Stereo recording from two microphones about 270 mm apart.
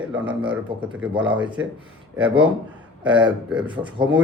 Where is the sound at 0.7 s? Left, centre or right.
Centre.